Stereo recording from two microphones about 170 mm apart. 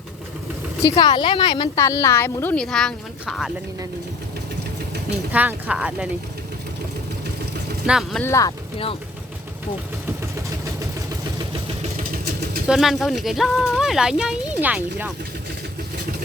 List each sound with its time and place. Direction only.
0.9 s a woman's voice: 25° left (ahead or behind)
1.7 s a woman's voice: 15° left (ahead or behind); by 3.5 s centre (ahead or behind)
5.3 s speech: 10° right (ahead or behind)
7.9 s speech: centre (ahead or behind)
8.2 s a woman's voice: 20° left (ahead or behind)
11.8 s vehicle: 55° right (ahead or behind)
12.6 s speech: 5° right (ahead or behind)